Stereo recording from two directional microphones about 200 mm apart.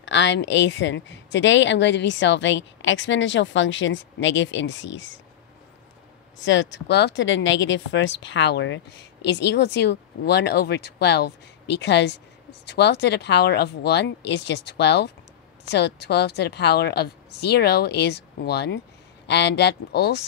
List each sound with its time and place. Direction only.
0.0 s speech: 65° left (ahead or behind)
6.4 s speech: 65° left (ahead or behind)